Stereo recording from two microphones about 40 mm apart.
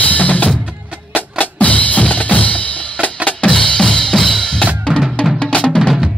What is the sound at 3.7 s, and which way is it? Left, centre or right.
Drum, centre.